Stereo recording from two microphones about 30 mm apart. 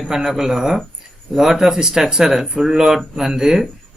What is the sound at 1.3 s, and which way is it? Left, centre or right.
Speech, centre.